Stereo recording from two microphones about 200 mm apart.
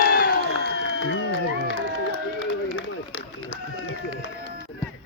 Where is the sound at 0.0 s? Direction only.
45° left (ahead or behind).